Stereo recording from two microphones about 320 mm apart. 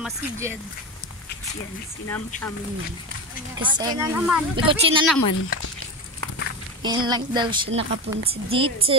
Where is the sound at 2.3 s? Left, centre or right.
Left.